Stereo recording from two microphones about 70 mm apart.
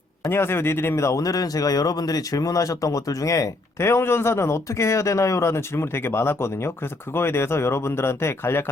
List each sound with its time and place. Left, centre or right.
0.3 s speech: left
3.8 s speech: left